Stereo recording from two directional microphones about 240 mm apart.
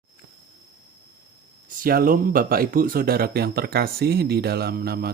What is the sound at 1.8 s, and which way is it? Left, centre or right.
Speech, right.